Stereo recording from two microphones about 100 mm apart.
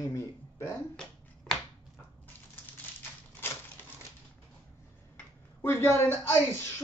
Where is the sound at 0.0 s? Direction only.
30° left (ahead or behind).